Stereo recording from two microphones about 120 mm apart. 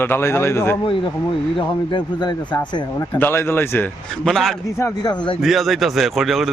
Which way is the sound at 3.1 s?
20° left (ahead or behind).